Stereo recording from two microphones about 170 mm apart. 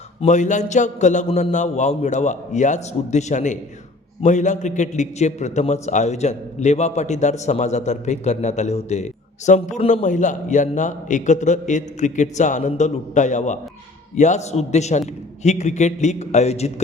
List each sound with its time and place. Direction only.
0.2 s a man's voice: 45° left (ahead or behind)